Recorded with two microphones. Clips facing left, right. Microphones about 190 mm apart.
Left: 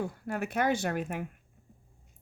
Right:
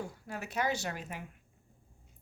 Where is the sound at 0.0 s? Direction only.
55° left (ahead or behind).